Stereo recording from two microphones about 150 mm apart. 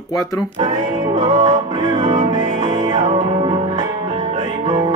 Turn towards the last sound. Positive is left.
turn(degrees=-35)  # may be behind; listen again after turning